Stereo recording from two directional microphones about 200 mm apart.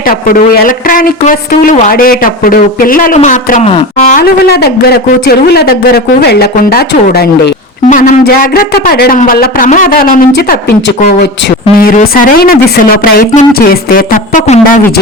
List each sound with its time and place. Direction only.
0.1 s a woman's voice: 45° left (ahead or behind); by 3.8 s 30° left (ahead or behind)
4.1 s a woman's voice: 50° left (ahead or behind)
7.9 s a woman's voice: 35° left (ahead or behind)